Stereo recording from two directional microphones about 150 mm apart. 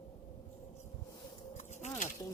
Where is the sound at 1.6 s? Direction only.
50° left (ahead or behind).